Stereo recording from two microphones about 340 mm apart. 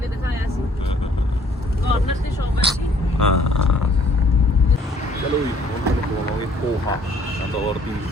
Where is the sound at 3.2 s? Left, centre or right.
Left.